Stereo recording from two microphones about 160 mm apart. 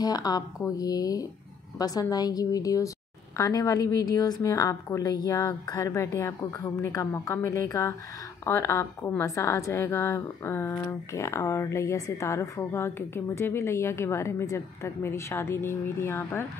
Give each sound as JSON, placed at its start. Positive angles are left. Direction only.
{"t": 0.0, "sound": "a woman's voice", "side_deg": 25}